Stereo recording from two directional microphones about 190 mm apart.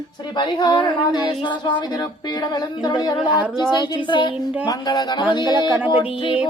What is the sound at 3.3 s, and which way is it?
Speech, 10° right (ahead or behind).